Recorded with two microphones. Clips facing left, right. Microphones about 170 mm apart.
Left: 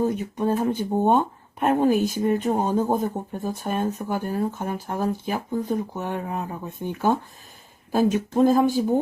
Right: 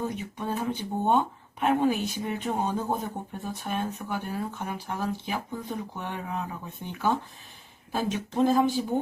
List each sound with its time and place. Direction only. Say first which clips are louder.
0.0 s speech: left 9 dB; 45° left (ahead or behind)